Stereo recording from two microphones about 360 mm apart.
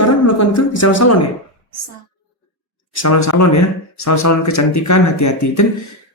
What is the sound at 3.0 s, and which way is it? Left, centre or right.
Speech, left.